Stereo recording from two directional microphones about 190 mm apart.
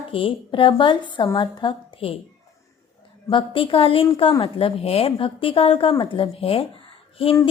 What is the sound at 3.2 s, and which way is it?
A woman's voice, 25° left (ahead or behind).